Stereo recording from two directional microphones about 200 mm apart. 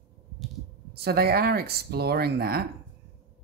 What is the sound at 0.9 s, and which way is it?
Speech, 50° right (ahead or behind).